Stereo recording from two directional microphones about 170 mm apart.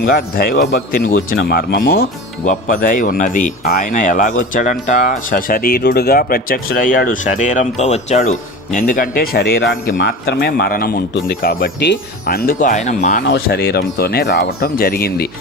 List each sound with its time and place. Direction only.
0.2 s speech: 60° left (ahead or behind)
2.4 s speech: 50° left (ahead or behind)
13.2 s speech: 65° left (ahead or behind)